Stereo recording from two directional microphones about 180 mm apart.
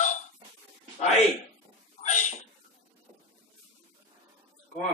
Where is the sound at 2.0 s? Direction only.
40° left (ahead or behind).